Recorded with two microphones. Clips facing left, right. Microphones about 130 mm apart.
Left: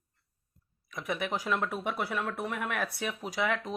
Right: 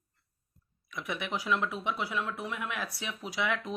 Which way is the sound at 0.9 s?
40° left (ahead or behind).